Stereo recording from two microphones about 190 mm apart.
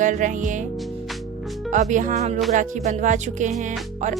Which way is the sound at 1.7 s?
40° right (ahead or behind).